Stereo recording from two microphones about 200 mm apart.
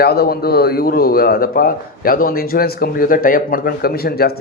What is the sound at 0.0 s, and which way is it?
A man's voice, 50° left (ahead or behind).